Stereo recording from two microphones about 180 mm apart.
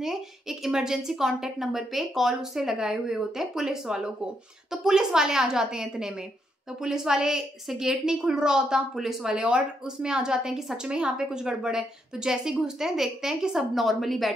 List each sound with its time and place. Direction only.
0.0 s a woman's voice: centre (ahead or behind)